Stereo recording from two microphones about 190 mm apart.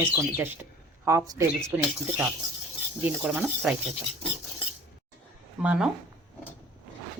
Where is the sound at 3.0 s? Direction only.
5° right (ahead or behind).